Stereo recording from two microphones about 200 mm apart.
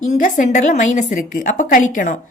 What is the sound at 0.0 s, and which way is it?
A woman's voice, 40° left (ahead or behind).